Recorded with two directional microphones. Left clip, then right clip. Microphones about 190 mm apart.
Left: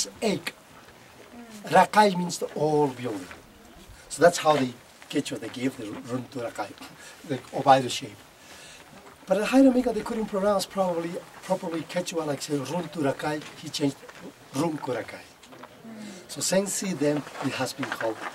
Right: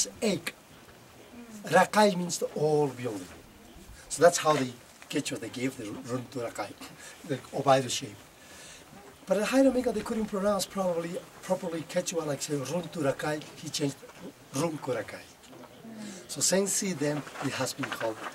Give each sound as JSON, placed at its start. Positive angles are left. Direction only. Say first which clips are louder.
{"t": 0.0, "sound": "speech", "louder": "left 2 dB", "side_deg": -5}
{"t": 3.0, "sound": "speech", "louder": "left 3 dB", "side_deg": -15}
{"t": 4.1, "sound": "speech", "louder": "left 3 dB", "side_deg": 0}
{"t": 9.3, "sound": "speech", "louder": "left 4 dB", "side_deg": 0}